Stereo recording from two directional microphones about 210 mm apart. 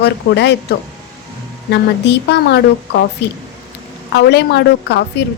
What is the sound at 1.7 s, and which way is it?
A woman's voice, 55° left (ahead or behind).